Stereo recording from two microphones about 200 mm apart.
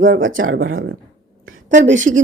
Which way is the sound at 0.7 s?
90° right.